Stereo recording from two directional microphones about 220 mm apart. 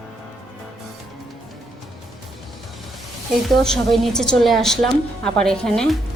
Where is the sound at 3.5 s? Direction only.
Centre (ahead or behind).